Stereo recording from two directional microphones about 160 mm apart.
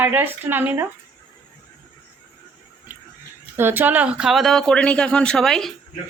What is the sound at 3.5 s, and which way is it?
Speech, 15° right (ahead or behind).